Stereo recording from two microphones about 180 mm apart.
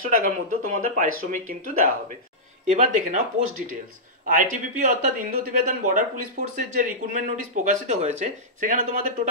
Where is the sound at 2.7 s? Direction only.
35° right (ahead or behind).